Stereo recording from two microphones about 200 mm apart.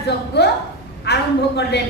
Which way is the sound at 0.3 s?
55° left (ahead or behind).